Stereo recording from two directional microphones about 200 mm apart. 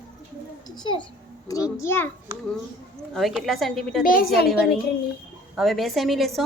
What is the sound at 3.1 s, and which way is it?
Speech, centre (ahead or behind).